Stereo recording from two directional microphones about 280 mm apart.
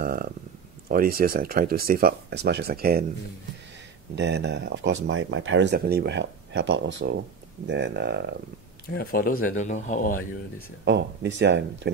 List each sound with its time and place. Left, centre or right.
0.0 s a sound: right
0.8 s speech: right
4.1 s speech: right
9.1 s speech: left
10.9 s speech: right